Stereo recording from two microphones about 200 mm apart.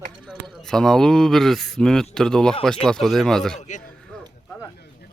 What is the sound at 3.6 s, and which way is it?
Speech, 35° left (ahead or behind).